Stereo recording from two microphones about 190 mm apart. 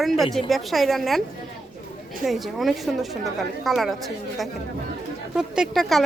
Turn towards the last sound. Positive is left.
turn(degrees=0)  # may be behind; listen again after turning